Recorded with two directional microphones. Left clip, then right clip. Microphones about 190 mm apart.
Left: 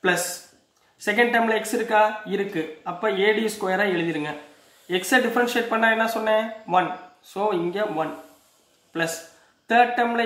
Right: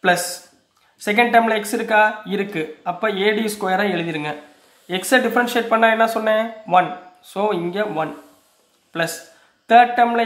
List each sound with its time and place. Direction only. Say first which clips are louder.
0.9 s speech: right 5 dB; 35° right (ahead or behind)
9.7 s speech: right 6 dB; 30° right (ahead or behind)